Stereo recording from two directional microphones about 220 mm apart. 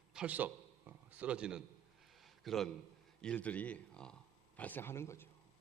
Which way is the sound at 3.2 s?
5° left (ahead or behind).